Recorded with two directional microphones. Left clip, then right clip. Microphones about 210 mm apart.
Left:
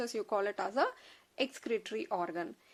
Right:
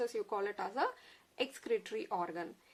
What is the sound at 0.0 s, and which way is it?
A woman's voice, 40° left (ahead or behind).